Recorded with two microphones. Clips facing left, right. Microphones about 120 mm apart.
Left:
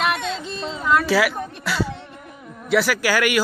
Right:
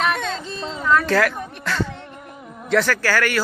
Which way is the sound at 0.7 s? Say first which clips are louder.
Even; 10° left (ahead or behind).